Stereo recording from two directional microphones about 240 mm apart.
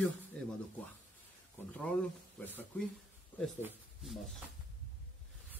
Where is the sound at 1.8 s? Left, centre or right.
Centre.